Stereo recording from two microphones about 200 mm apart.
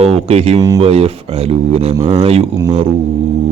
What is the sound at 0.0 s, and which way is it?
Speech, 30° right (ahead or behind).